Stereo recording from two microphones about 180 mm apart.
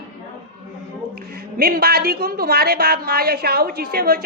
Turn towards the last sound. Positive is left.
turn(degrees=-55)  # may be behind; listen again after turning